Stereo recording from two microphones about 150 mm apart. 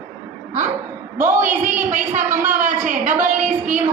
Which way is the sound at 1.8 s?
55° right (ahead or behind).